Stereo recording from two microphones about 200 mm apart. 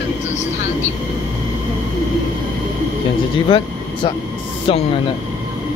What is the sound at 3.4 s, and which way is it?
Speech, 25° left (ahead or behind).